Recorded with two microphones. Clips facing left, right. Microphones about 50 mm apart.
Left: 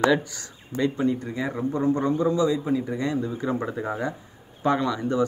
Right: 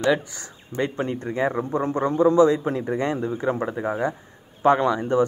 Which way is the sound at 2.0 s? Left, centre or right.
Right.